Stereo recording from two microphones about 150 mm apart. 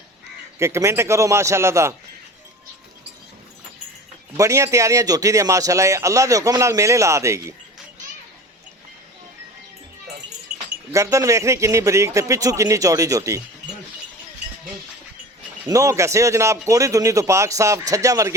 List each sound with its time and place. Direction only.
0.6 s speech: 20° right (ahead or behind)
4.4 s speech: 20° right (ahead or behind)
10.9 s speech: 20° right (ahead or behind)
15.6 s speech: 20° right (ahead or behind)